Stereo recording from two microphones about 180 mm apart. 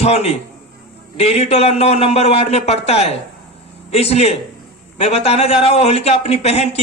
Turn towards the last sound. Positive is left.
turn(degrees=35)  # may be behind; listen again after turning